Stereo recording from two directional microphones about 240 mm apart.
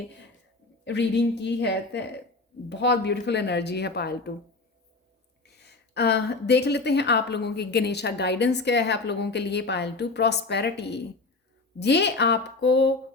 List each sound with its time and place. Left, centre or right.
0.9 s a woman's voice: left
5.5 s a woman's voice: left